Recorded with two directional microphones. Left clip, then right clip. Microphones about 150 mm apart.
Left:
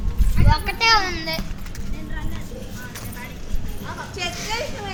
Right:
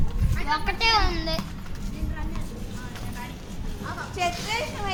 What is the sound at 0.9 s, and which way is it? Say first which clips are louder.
Speech: left 5 dB; 15° left (ahead or behind).